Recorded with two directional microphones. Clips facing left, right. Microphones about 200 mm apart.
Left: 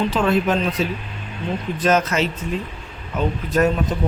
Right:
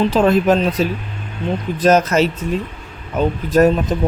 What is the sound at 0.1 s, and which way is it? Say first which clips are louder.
Speech: right 5 dB; 40° right (ahead or behind).